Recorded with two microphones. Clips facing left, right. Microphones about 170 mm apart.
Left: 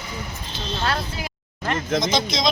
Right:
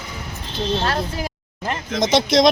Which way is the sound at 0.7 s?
40° right (ahead or behind).